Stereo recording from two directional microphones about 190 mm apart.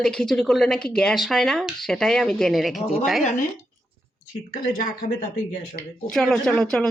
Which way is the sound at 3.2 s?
40° left (ahead or behind).